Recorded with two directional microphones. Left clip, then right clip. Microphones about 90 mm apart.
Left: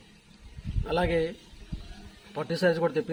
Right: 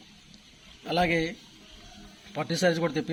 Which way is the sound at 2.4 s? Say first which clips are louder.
Even; 30° left (ahead or behind).